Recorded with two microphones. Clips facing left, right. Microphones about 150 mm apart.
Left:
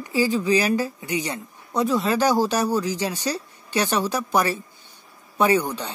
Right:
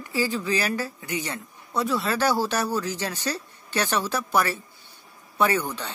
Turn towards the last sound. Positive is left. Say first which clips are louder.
# left 4 dB
turn(degrees=15)  # may be behind; listen again after turning